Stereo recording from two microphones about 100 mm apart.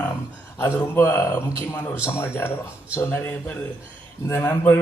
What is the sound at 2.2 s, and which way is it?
A man's voice, 25° left (ahead or behind).